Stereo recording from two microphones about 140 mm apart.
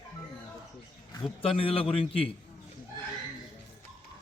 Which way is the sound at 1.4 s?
40° left (ahead or behind).